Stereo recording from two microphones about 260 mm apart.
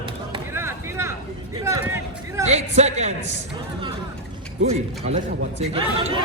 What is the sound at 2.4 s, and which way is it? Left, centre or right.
Speech, right.